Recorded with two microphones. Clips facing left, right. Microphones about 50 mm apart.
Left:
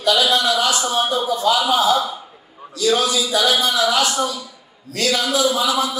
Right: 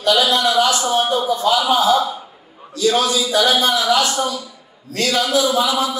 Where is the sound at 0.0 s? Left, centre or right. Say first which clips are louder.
Right 1 dB; right.